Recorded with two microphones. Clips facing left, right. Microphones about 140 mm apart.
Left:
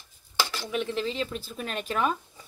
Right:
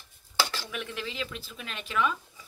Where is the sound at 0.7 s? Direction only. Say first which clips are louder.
Left 8 dB; 30° left (ahead or behind).